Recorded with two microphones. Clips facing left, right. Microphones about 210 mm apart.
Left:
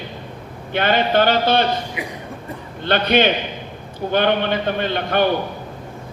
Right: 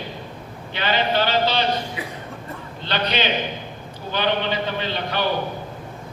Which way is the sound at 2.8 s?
55° left (ahead or behind).